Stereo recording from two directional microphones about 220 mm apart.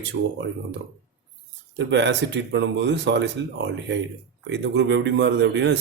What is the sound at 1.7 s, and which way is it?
Speech, 55° right (ahead or behind).